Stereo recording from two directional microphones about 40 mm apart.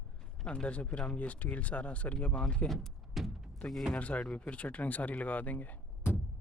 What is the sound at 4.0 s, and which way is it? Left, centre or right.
Speech, left.